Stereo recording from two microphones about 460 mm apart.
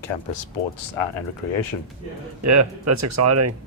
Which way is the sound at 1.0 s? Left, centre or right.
Left.